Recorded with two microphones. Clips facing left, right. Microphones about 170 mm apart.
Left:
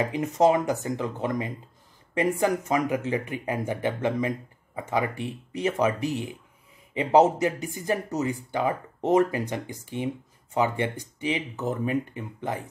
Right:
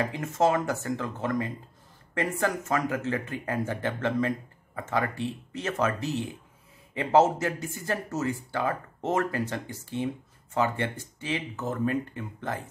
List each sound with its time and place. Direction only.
0.0 s speech: 15° left (ahead or behind)